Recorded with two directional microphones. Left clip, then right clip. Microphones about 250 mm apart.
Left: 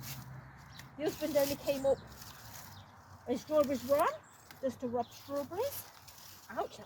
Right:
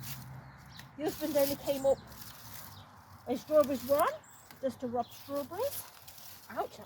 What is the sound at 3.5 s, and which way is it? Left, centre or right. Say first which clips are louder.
Speech: right 3 dB; centre.